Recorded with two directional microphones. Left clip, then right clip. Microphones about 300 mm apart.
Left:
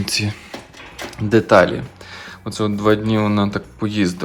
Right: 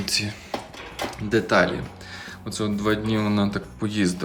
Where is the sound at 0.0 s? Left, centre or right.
Centre.